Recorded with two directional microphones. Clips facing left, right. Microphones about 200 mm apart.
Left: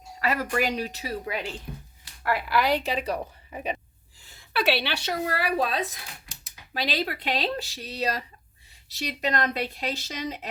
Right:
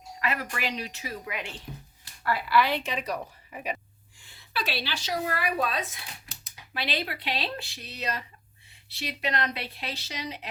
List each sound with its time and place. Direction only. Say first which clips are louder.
0.2 s a woman's voice: left 6 dB; 40° left (ahead or behind)
2.3 s a woman's voice: left 1 dB; 45° left (ahead or behind); by 3.8 s 30° left (ahead or behind)
4.2 s gasp: left 2 dB; 40° left (ahead or behind)
4.5 s a woman's voice: left 7 dB; 70° left (ahead or behind)
5.2 s a woman's voice: left 3 dB; 35° left (ahead or behind)